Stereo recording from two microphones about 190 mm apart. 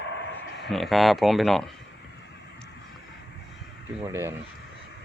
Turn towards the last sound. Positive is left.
turn(degrees=-15)  # may be behind; listen again after turning